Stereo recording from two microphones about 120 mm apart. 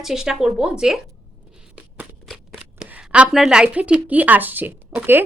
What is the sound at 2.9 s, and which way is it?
A woman's voice, 10° right (ahead or behind).